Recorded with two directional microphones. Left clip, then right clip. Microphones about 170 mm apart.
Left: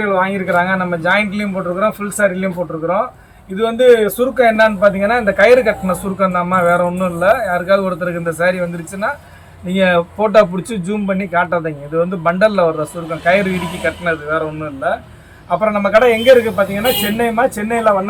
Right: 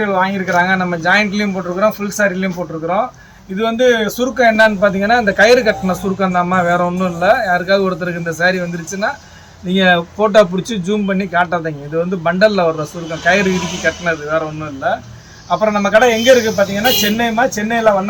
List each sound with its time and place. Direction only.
0.0 s a man's voice: 5° left (ahead or behind)